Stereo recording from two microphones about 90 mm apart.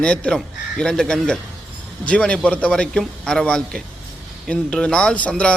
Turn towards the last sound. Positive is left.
turn(degrees=10)  # may be behind; listen again after turning